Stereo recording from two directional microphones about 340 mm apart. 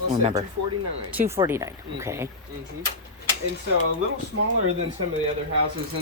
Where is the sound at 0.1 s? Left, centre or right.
Centre.